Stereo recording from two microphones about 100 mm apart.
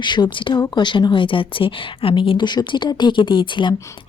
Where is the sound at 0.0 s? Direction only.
50° left (ahead or behind).